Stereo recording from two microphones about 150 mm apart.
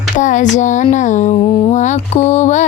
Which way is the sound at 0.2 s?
55° left (ahead or behind).